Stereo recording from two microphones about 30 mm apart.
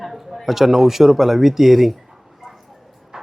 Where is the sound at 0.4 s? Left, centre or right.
Centre.